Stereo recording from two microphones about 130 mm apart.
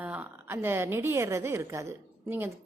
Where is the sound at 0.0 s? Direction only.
10° right (ahead or behind).